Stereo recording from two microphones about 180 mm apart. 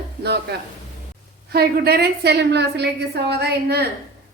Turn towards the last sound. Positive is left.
turn(degrees=-65)  # may be behind; listen again after turning